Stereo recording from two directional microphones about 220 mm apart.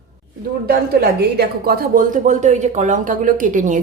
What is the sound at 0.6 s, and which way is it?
Speech, 45° right (ahead or behind).